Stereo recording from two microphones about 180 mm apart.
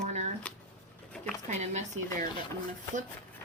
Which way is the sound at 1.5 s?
40° right (ahead or behind).